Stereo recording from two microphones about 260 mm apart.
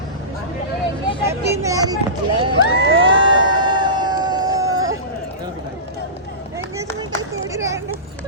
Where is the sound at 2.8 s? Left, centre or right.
Right.